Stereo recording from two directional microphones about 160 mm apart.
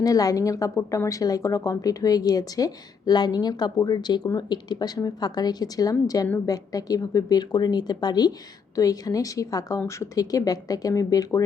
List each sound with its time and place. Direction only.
0.0 s a woman's voice: 20° left (ahead or behind)